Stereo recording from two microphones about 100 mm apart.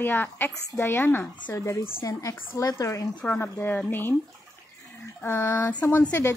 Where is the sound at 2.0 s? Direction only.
35° left (ahead or behind).